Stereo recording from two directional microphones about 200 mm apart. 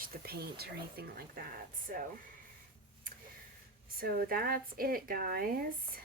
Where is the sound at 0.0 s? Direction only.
50° right (ahead or behind).